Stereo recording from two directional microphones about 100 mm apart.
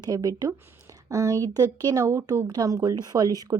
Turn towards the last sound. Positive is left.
turn(degrees=-40)  # may be behind; listen again after turning